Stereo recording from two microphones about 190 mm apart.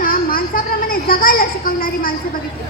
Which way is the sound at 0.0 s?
50° left (ahead or behind).